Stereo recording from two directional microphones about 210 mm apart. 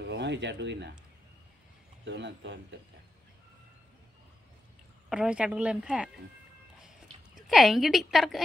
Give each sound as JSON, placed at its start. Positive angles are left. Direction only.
{"t": 0.0, "sound": "speech", "side_deg": -55}
{"t": 2.0, "sound": "speech", "side_deg": -55}
{"t": 5.1, "sound": "a woman's voice", "side_deg": -5}
{"t": 7.3, "sound": "a woman's voice", "side_deg": 0}